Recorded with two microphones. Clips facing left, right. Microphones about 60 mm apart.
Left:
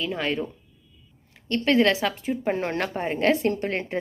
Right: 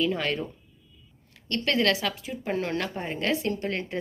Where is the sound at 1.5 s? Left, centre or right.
Left.